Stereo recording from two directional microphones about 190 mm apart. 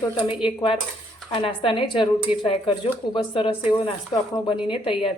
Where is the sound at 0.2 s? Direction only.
5° right (ahead or behind).